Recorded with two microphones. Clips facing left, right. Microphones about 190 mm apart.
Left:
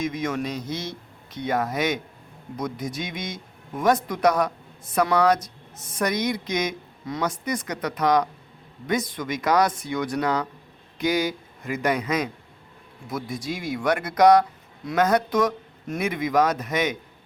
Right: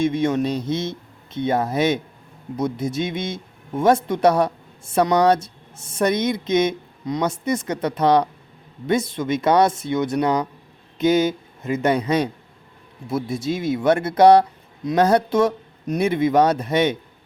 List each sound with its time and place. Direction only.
0.0 s a man's voice: 30° right (ahead or behind)